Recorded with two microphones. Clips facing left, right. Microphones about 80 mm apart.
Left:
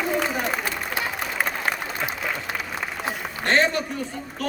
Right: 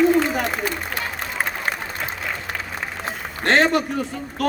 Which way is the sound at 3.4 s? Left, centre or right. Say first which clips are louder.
Right 4 dB; right.